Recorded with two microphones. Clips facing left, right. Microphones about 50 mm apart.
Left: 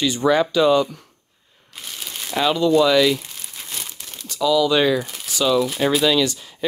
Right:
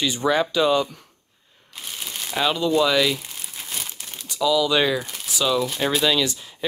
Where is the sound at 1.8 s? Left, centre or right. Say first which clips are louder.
Even; centre.